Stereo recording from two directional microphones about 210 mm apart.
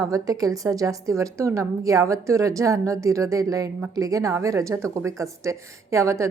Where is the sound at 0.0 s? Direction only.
15° right (ahead or behind).